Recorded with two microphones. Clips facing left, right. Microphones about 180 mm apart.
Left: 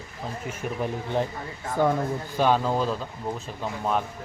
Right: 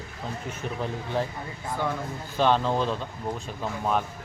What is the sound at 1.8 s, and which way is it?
Speech, 45° left (ahead or behind).